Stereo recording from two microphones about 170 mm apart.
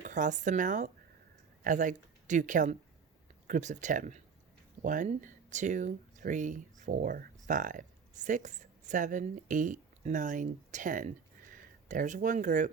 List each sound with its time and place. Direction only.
0.0 s speech: 50° right (ahead or behind)